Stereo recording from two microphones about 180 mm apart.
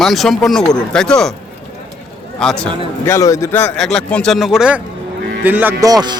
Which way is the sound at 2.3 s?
5° left (ahead or behind).